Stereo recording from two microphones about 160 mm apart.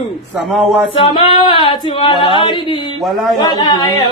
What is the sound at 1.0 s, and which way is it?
Female singing, 35° left (ahead or behind).